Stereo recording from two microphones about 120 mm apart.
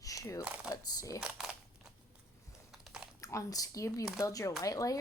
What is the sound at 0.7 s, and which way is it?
Speech, 30° left (ahead or behind).